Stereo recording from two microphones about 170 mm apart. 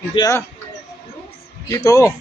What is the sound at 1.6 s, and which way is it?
Speech, 20° left (ahead or behind).